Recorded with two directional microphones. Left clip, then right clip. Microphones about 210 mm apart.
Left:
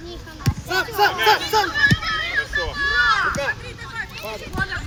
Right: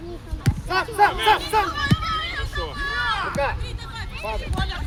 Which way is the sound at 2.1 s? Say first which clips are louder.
Left 4 dB; 60° right (ahead or behind).